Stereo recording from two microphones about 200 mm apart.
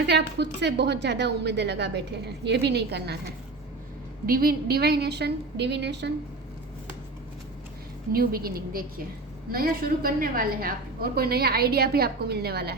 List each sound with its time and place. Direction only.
0.0 s a woman's voice: 55° right (ahead or behind)
4.3 s a woman's voice: 45° right (ahead or behind)
8.1 s a woman's voice: 50° right (ahead or behind)